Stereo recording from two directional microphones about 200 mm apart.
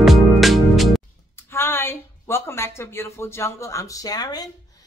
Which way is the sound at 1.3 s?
10° left (ahead or behind).